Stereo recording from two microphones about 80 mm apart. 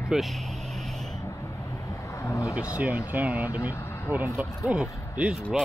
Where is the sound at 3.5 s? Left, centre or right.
Left.